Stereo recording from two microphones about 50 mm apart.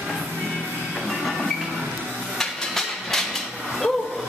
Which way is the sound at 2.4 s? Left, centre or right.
Centre.